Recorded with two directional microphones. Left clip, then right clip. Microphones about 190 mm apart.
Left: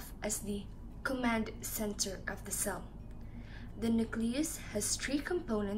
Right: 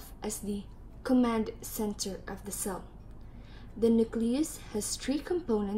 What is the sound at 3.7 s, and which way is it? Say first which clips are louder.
A woman's voice: right 9 dB; 25° right (ahead or behind).